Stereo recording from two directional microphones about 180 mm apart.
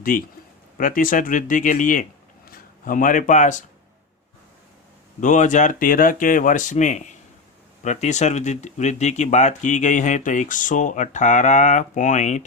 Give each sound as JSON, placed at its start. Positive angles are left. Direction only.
{"t": 0.0, "sound": "speech", "side_deg": 50}
{"t": 5.2, "sound": "speech", "side_deg": 45}